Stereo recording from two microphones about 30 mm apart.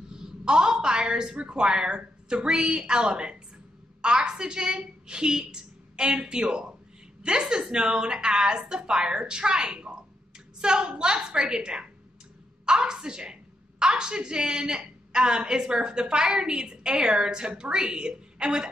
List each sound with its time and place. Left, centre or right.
0.1 s a woman's voice: right